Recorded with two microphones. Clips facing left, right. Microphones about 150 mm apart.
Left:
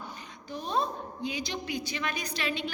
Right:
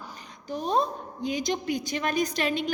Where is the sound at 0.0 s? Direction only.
40° right (ahead or behind).